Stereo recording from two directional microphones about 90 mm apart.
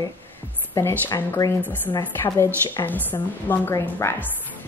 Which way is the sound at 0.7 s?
30° left (ahead or behind).